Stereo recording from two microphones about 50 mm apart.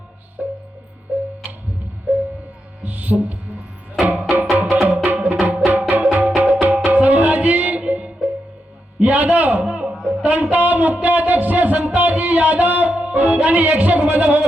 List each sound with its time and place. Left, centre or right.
0.4 s music: centre
1.1 s tick-tock: right
2.8 s hum: right
4.0 s music: right
9.0 s a sound: right
9.9 s music: centre
10.2 s speech: right